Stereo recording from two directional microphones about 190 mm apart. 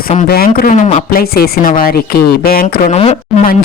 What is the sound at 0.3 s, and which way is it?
Speech, 50° left (ahead or behind).